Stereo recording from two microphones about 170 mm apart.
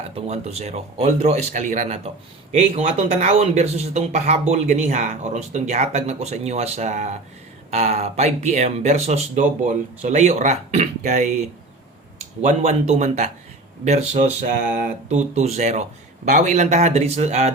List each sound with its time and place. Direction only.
0.3 s speech: 40° right (ahead or behind)
12.4 s speech: 45° right (ahead or behind)
14.4 s speech: 55° right (ahead or behind)
15.1 s speech: 40° right (ahead or behind)